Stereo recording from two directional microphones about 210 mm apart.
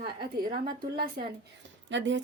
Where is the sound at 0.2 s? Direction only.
45° right (ahead or behind).